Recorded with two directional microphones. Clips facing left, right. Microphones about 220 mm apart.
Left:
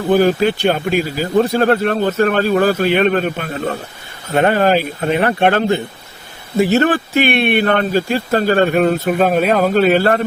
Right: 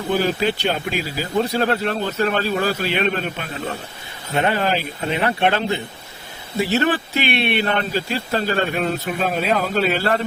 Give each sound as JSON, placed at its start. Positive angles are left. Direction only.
{"t": 0.1, "sound": "speech", "side_deg": 50}